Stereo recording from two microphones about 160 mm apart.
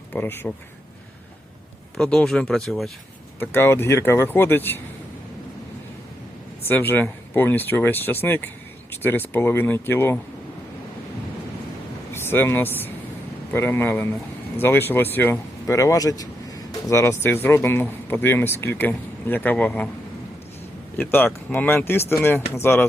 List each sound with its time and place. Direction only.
0.1 s speech: 10° left (ahead or behind)
2.0 s speech: 5° left (ahead or behind)
3.4 s speech: 15° left (ahead or behind)
6.7 s speech: 10° left (ahead or behind)
12.1 s speech: 15° left (ahead or behind)
21.0 s speech: 10° left (ahead or behind)